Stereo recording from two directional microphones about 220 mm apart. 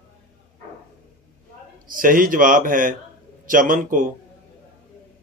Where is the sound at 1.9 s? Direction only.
40° right (ahead or behind).